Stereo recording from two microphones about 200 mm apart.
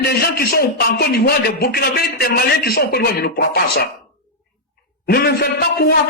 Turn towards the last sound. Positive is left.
turn(degrees=50)  # may be behind; listen again after turning